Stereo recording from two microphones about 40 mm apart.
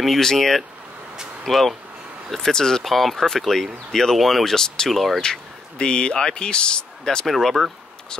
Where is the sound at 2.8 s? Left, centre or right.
Centre.